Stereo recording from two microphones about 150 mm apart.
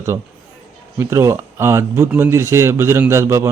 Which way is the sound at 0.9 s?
20° right (ahead or behind).